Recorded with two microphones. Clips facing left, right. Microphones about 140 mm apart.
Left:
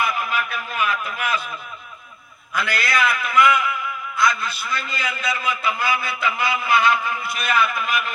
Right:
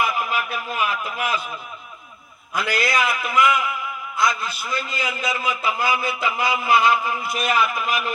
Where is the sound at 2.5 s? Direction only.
40° right (ahead or behind).